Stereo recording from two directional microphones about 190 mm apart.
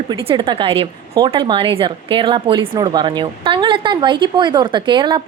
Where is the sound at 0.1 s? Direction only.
25° right (ahead or behind).